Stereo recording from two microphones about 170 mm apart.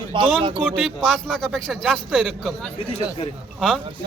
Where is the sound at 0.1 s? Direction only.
30° right (ahead or behind).